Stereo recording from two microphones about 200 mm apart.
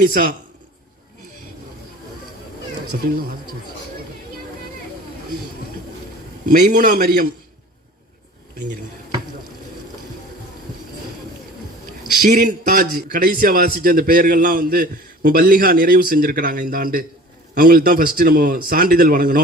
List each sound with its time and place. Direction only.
0.0 s a man's voice: 45° right (ahead or behind)
6.4 s a man's voice: 40° right (ahead or behind)
12.2 s a man's voice: 45° right (ahead or behind)